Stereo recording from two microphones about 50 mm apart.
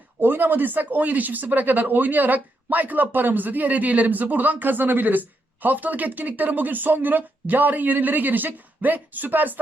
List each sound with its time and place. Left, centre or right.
0.2 s speech: right